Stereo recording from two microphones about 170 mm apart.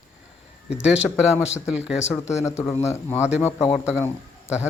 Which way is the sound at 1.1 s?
15° left (ahead or behind).